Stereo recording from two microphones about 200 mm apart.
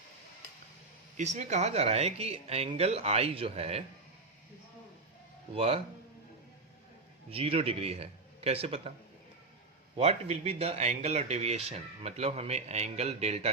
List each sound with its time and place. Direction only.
1.1 s speech: 35° right (ahead or behind)
5.5 s speech: 30° right (ahead or behind)
7.3 s speech: 30° right (ahead or behind)
10.0 s speech: 30° right (ahead or behind)